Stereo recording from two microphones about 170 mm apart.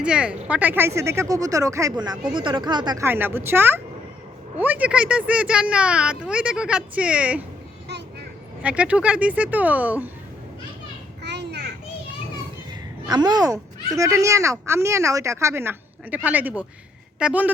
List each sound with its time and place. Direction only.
0.0 s a woman's voice: 5° right (ahead or behind); by 3.1 s 25° right (ahead or behind)
3.1 s speech: 10° right (ahead or behind)
8.6 s speech: 5° right (ahead or behind)
11.2 s children playing: 80° right
13.1 s speech: 25° right (ahead or behind); by 17.5 s 5° right (ahead or behind)